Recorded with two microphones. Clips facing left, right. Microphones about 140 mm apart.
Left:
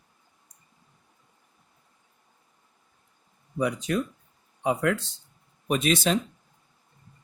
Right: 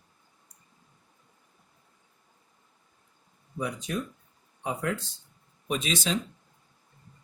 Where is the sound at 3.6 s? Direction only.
75° left (ahead or behind).